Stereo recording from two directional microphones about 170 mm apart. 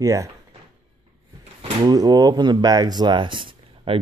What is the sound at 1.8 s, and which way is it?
Speech, 25° right (ahead or behind).